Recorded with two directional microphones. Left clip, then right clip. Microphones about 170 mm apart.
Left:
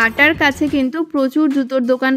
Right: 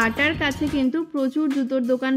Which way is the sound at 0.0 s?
40° left (ahead or behind).